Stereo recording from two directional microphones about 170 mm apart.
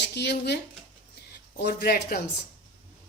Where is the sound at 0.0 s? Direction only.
80° left.